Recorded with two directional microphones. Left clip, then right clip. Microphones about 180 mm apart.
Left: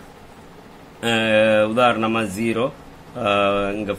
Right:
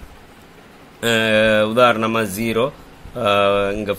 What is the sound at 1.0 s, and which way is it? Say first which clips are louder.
Speech: right 1 dB; 50° right (ahead or behind).